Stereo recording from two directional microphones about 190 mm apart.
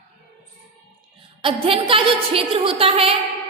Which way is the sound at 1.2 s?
30° right (ahead or behind).